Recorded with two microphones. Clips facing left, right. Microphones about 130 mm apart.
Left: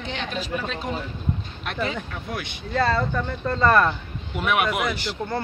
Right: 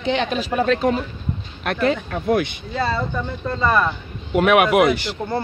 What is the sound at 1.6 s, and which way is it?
Speech, 65° right (ahead or behind).